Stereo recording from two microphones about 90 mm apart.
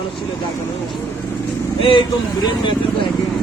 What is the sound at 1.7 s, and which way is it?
Speech, 80° left.